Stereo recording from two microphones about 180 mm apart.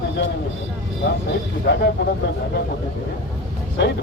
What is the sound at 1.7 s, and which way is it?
Speech, 65° left (ahead or behind).